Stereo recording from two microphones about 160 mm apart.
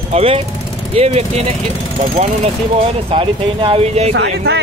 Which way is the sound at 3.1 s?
35° right (ahead or behind).